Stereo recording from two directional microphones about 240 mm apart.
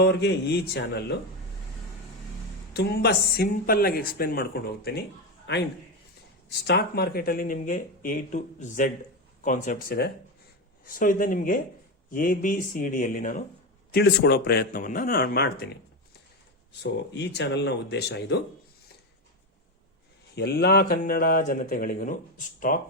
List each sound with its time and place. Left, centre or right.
0.0 s speech: left
2.7 s a man's voice: left
6.7 s speech: left
16.8 s speech: left
20.3 s speech: left